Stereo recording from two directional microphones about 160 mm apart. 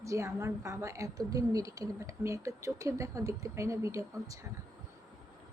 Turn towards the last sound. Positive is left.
turn(degrees=-20)  # may be behind; listen again after turning